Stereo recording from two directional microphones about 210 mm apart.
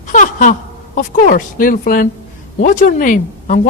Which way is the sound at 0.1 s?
40° left (ahead or behind).